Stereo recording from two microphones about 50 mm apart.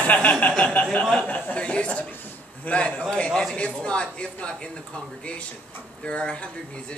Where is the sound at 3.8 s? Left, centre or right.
Left.